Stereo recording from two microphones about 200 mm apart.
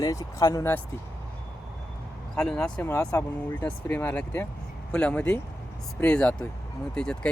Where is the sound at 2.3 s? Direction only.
5° left (ahead or behind).